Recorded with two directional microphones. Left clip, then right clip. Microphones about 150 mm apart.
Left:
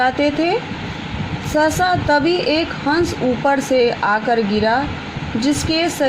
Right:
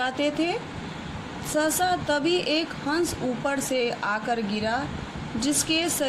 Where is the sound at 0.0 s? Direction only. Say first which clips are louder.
Left 9 dB; 40° left (ahead or behind).